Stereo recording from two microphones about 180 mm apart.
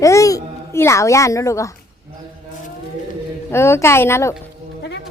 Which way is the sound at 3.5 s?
15° left (ahead or behind).